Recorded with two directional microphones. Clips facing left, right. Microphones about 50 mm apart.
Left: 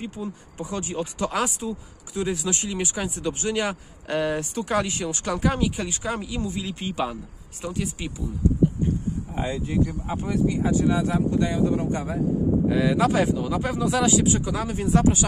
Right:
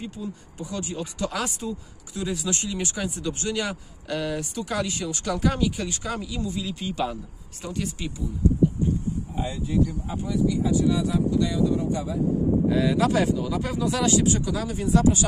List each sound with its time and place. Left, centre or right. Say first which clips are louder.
0.0 s speech: left 2 dB; left
1.4 s speech: left 3 dB; centre
2.1 s speech: left 2 dB; left
7.6 s speech: left 1 dB; centre
8.8 s a sound: even; left
9.8 s speech: left 2 dB; left
12.6 s speech: left 2 dB; centre
13.9 s speech: left 1 dB; centre
14.4 s speech: left 1 dB; left